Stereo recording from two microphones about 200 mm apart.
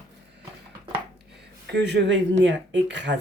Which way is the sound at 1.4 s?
55° right (ahead or behind).